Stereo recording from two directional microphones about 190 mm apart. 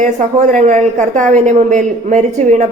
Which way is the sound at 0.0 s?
40° right (ahead or behind).